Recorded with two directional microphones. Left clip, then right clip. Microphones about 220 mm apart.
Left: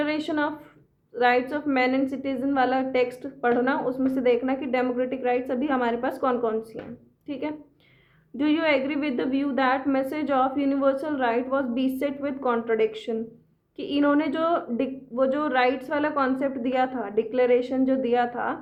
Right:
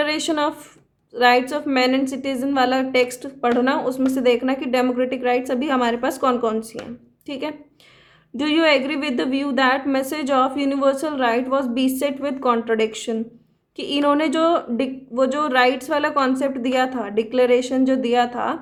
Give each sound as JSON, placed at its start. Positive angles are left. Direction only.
{"t": 0.0, "sound": "a woman's voice", "side_deg": -35}